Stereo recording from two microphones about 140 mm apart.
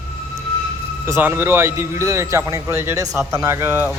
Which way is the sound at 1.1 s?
15° right (ahead or behind).